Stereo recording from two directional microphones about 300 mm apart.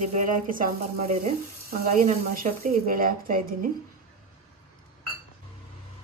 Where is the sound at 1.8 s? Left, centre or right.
Right.